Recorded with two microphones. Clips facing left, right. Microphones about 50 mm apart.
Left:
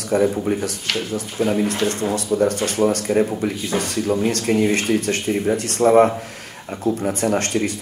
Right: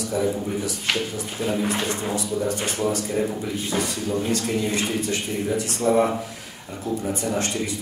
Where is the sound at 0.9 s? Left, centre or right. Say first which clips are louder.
Even; centre.